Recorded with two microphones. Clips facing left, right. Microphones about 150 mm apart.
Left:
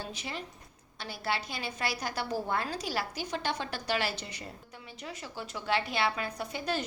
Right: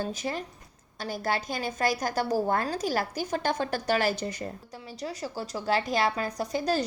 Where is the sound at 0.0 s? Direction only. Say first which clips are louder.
Right 8 dB; 45° right (ahead or behind).